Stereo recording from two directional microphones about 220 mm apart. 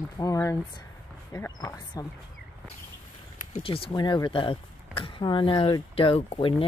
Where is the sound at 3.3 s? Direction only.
30° left (ahead or behind).